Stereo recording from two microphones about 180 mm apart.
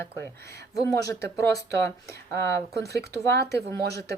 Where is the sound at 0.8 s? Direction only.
20° left (ahead or behind).